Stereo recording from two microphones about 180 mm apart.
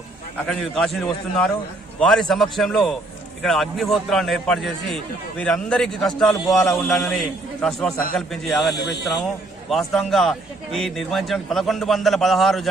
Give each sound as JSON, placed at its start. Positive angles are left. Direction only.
{"t": 0.4, "sound": "a man's voice", "side_deg": 0}
{"t": 8.7, "sound": "speech", "side_deg": 65}
{"t": 9.0, "sound": "a man's voice", "side_deg": 0}